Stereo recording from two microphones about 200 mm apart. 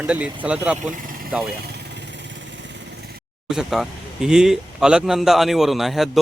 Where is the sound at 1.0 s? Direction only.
45° right (ahead or behind).